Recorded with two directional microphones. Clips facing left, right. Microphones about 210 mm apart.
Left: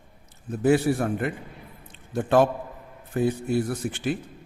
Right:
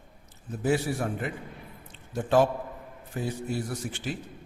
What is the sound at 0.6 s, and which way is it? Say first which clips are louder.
Speech: left 6 dB; 60° left (ahead or behind).